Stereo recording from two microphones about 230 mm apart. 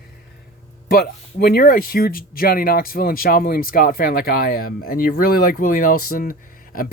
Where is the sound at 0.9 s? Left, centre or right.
Left.